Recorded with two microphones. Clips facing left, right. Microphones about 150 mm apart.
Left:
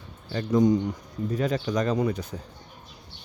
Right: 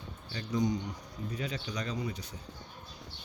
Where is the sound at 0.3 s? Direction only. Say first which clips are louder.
Left 10 dB; 50° left (ahead or behind).